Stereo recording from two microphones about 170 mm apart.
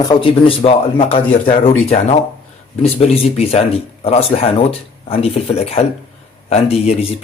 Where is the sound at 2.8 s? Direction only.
35° left (ahead or behind).